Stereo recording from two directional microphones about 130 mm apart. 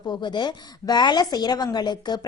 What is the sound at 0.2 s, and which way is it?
A woman's voice, 35° left (ahead or behind).